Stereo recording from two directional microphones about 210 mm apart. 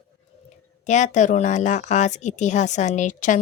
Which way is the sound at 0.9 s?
35° left (ahead or behind).